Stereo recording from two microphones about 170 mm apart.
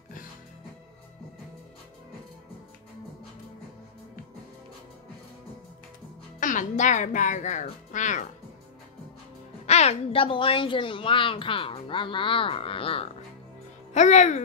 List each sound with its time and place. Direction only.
6.4 s speech: 50° left (ahead or behind)
9.7 s a woman's voice: 40° left (ahead or behind)